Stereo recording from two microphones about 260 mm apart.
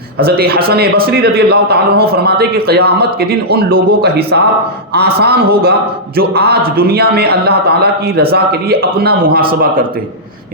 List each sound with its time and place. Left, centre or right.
0.2 s a man's voice: right